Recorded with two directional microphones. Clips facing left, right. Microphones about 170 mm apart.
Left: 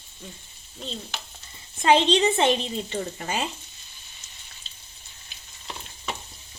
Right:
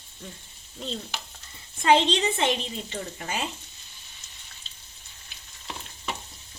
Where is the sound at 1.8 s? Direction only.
25° left (ahead or behind).